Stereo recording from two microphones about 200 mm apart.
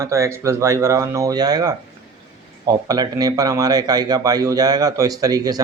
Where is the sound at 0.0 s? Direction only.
15° right (ahead or behind).